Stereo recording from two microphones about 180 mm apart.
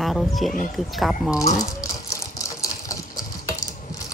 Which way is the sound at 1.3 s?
20° left (ahead or behind).